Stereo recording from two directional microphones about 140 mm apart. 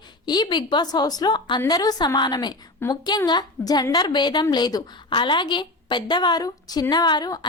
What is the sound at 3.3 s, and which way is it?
A woman's voice, 30° left (ahead or behind).